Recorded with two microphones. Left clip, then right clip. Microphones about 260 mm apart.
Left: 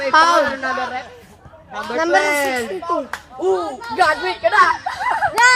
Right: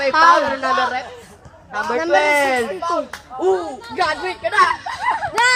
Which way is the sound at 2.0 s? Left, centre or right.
Centre.